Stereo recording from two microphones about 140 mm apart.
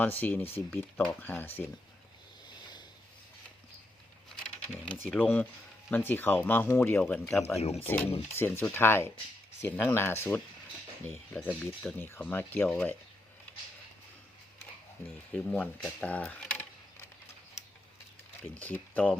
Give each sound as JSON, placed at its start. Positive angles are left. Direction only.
{"t": 0.0, "sound": "speech", "side_deg": 15}
{"t": 2.6, "sound": "a sound", "side_deg": 30}
{"t": 5.0, "sound": "speech", "side_deg": 10}
{"t": 7.0, "sound": "speech", "side_deg": 0}
{"t": 7.6, "sound": "speech", "side_deg": 45}
{"t": 7.9, "sound": "speech", "side_deg": 15}
{"t": 15.3, "sound": "speech", "side_deg": 10}
{"t": 18.6, "sound": "speech", "side_deg": 10}